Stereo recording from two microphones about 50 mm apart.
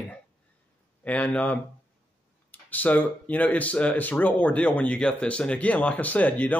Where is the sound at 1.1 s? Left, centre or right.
Left.